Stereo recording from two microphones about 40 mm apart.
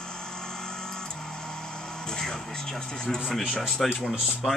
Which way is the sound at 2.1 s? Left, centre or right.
Centre.